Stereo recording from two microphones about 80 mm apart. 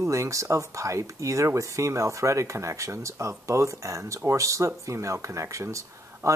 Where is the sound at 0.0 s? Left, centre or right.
Right.